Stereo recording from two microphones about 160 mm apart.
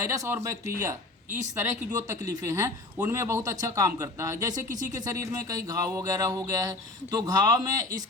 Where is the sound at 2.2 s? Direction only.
20° right (ahead or behind).